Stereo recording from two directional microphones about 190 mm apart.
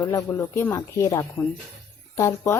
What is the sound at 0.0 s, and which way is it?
Speech, 15° left (ahead or behind).